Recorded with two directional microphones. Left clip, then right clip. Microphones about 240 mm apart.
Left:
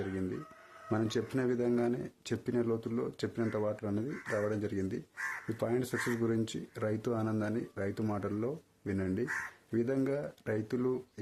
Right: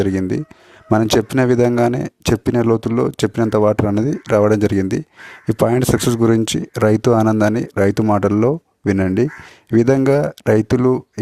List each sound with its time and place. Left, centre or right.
0.9 s speech: right